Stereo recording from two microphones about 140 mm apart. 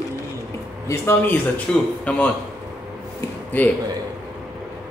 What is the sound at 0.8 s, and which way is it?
Speech, 15° left (ahead or behind).